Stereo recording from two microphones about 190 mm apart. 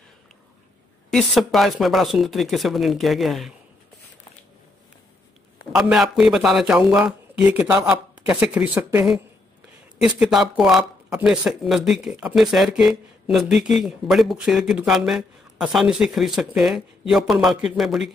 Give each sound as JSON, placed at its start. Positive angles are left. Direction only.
{"t": 1.1, "sound": "speech", "side_deg": 0}
{"t": 5.7, "sound": "speech", "side_deg": -5}